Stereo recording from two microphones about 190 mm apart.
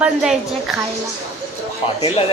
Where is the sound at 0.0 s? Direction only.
5° right (ahead or behind).